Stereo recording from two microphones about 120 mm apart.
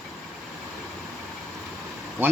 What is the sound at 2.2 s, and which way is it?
Speech, 15° right (ahead or behind).